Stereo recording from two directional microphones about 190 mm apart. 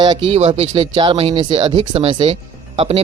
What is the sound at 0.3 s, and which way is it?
Speech, 35° right (ahead or behind).